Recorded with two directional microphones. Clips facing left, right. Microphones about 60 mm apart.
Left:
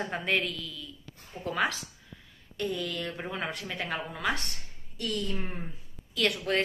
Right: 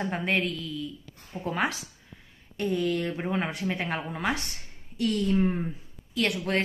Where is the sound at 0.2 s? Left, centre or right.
Right.